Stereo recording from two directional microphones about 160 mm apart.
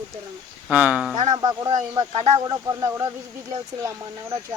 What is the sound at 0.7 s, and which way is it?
Speech, 10° right (ahead or behind).